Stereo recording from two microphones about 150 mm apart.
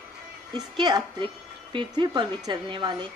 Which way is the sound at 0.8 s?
30° right (ahead or behind).